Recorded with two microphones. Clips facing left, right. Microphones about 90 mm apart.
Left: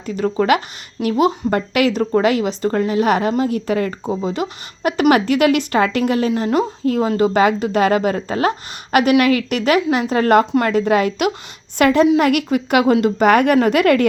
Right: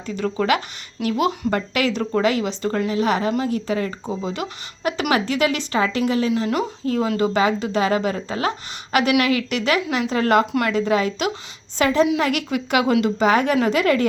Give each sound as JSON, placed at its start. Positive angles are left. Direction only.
{"t": 0.0, "sound": "a woman's voice", "side_deg": 45}
{"t": 13.2, "sound": "speech", "side_deg": 60}